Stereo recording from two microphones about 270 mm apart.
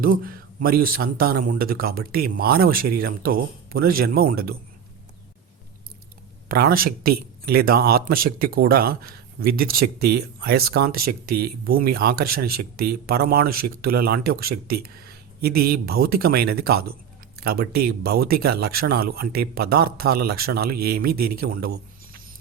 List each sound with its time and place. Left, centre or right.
0.0 s speech: right
6.5 s speech: right